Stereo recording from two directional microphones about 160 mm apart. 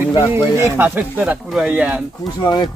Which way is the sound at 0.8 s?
10° right (ahead or behind).